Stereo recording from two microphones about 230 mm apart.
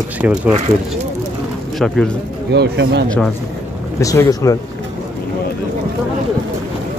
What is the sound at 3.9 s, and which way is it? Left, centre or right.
Speech, centre.